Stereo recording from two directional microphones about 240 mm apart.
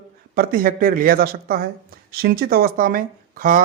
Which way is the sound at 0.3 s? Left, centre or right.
Right.